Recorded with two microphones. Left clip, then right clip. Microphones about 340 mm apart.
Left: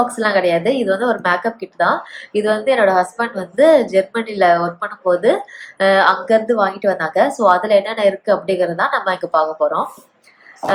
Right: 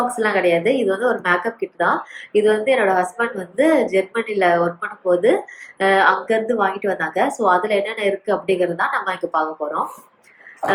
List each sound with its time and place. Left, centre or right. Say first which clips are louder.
0.2 s speech: right 1 dB; left